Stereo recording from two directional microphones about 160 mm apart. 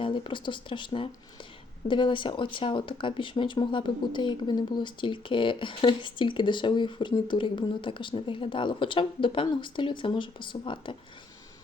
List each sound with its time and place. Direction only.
0.0 s speech: 30° left (ahead or behind)